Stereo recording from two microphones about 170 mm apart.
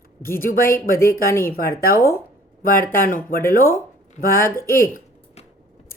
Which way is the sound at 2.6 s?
55° left (ahead or behind).